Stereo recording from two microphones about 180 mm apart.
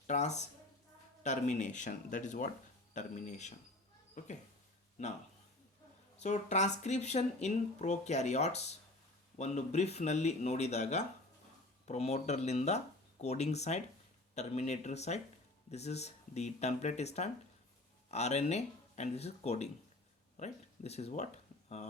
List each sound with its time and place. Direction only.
0.1 s speech: 40° left (ahead or behind)
6.1 s speech: 40° left (ahead or behind)